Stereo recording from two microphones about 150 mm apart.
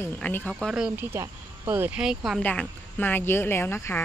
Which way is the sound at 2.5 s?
10° left (ahead or behind).